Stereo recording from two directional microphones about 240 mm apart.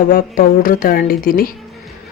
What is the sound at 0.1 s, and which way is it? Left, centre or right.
Speech, left.